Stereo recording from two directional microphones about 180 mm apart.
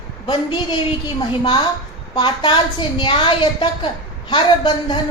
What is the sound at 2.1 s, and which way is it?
A woman's voice, 30° left (ahead or behind).